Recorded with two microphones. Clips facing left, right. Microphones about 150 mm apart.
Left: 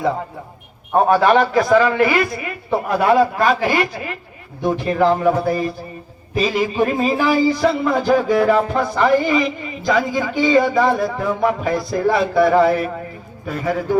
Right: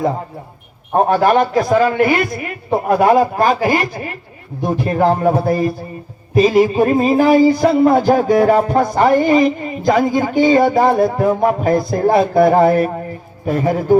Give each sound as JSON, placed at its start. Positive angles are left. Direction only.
{"t": 0.9, "sound": "a man's voice", "side_deg": -45}